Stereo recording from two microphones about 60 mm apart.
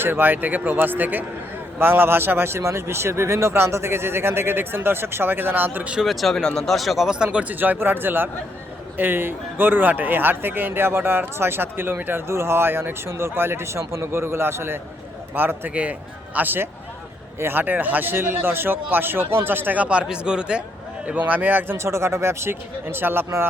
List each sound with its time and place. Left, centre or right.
0.0 s speech: right
6.0 s speech: centre
7.3 s speech: right
12.3 s a man's voice: right
15.7 s speech: right
21.2 s speech: right
21.8 s a man's voice: right